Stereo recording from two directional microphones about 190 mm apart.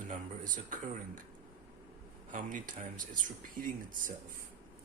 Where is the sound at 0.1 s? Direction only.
45° right (ahead or behind).